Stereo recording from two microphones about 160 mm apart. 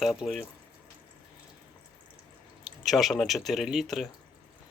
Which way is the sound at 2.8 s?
Centre (ahead or behind).